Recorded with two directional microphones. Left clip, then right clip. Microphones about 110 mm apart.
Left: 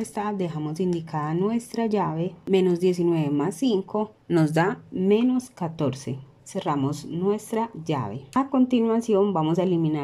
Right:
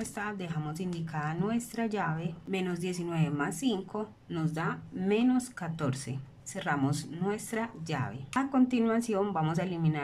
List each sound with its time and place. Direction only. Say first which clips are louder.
0.1 s speech: left 9 dB; 40° left (ahead or behind)
0.6 s speech: left 11 dB; 30° left (ahead or behind)
4.3 s speech: left 13 dB; 90° left
5.0 s speech: left 7 dB; 30° left (ahead or behind)
8.5 s a woman's voice: left 5 dB; 25° left (ahead or behind)